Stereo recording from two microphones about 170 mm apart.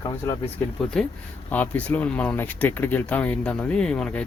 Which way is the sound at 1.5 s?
10° left (ahead or behind).